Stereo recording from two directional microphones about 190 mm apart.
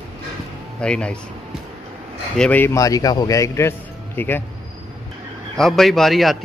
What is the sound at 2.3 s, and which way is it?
A man's voice, 5° left (ahead or behind).